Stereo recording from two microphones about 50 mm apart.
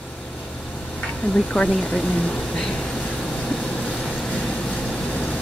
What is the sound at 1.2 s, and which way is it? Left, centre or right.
Speech, left.